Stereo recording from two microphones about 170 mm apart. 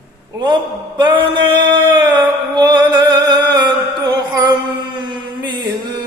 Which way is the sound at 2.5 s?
25° right (ahead or behind).